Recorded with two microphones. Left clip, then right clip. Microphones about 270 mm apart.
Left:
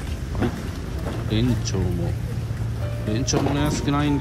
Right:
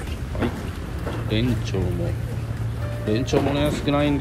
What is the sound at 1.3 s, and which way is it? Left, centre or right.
Speech, centre.